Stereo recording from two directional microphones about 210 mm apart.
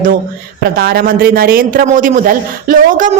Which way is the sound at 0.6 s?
45° right (ahead or behind).